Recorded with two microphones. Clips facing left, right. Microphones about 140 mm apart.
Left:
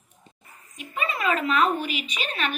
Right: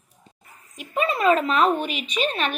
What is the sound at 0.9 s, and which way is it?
Speech, 40° right (ahead or behind).